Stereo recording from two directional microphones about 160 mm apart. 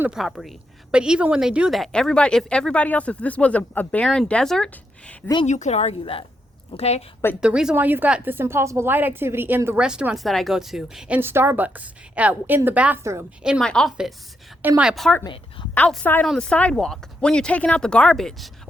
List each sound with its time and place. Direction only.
0.0 s a woman's voice: 5° right (ahead or behind)
5.5 s a woman's voice: 45° left (ahead or behind)
7.4 s a woman's voice: 5° right (ahead or behind)
11.2 s a woman's voice: 15° right (ahead or behind); by 13.9 s 5° left (ahead or behind)
14.6 s a woman's voice: 10° right (ahead or behind)
15.2 s a woman's voice: 30° left (ahead or behind)
15.7 s a woman's voice: 10° left (ahead or behind)